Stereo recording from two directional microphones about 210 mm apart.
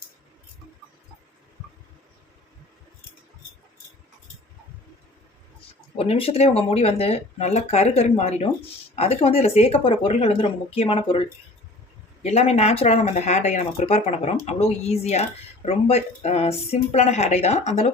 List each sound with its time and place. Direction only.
6.0 s speech: 25° left (ahead or behind)
12.2 s speech: 30° left (ahead or behind)